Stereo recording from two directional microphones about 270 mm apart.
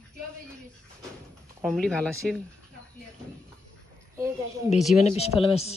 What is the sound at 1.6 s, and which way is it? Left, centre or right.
Speech, centre.